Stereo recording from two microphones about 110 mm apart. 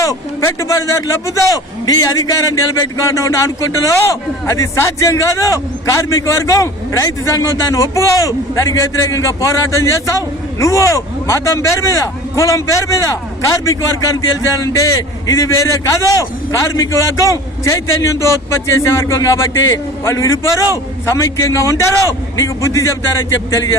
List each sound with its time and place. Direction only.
0.0 s a man's voice: 30° left (ahead or behind)